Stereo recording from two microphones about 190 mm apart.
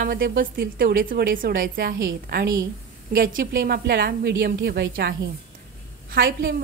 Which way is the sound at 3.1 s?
50° right (ahead or behind).